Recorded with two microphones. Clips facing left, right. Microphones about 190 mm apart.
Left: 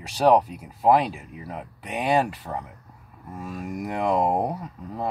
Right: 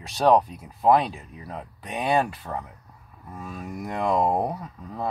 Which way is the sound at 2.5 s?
20° left (ahead or behind).